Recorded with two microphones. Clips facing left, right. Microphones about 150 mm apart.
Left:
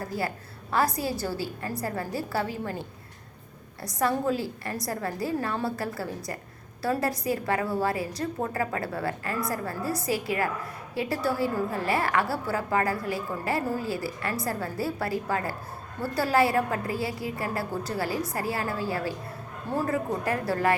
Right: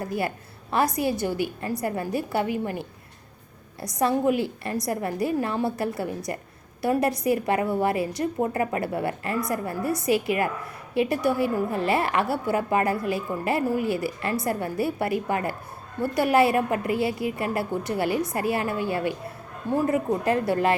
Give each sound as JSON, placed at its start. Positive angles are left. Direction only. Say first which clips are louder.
{"t": 0.0, "sound": "a woman's voice", "louder": "right 3 dB", "side_deg": -20}
{"t": 3.9, "sound": "a woman's voice", "louder": "right 4 dB", "side_deg": -20}